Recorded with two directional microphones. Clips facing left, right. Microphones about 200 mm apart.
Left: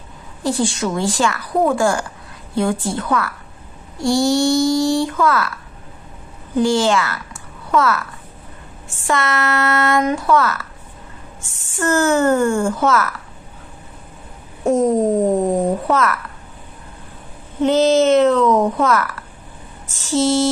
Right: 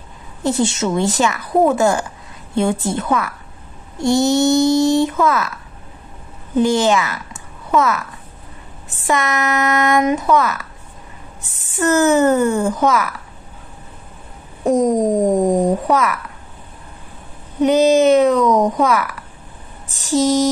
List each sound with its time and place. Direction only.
0.4 s a woman's voice: 20° right (ahead or behind)
6.5 s a child's voice: 20° right (ahead or behind)
9.0 s speech: 15° right (ahead or behind)
11.7 s speech: 20° right (ahead or behind)
14.6 s speech: 15° right (ahead or behind)
17.6 s speech: 15° right (ahead or behind)